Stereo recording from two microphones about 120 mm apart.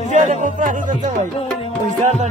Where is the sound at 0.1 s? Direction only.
90° right.